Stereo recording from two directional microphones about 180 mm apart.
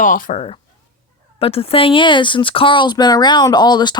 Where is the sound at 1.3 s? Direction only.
35° left (ahead or behind).